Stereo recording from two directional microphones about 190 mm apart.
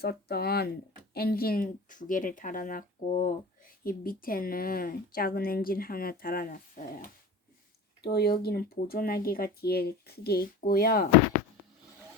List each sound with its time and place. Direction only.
0.0 s a woman's voice: 55° left (ahead or behind)
8.0 s a woman's voice: 55° left (ahead or behind)